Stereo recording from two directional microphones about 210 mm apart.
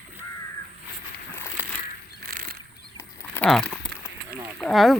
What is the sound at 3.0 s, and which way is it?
Livestock, 10° left (ahead or behind).